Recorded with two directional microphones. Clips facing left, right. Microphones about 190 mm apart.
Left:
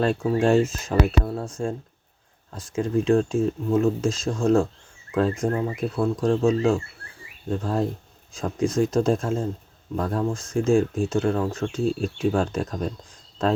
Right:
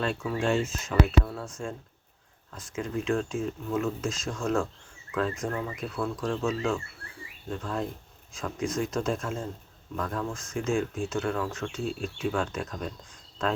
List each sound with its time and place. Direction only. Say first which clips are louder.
0.0 s speech: left 8 dB; 40° left (ahead or behind)
2.5 s speech: left 8 dB; 35° left (ahead or behind)